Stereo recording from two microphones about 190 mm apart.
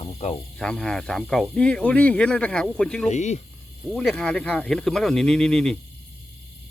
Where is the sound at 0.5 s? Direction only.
5° left (ahead or behind).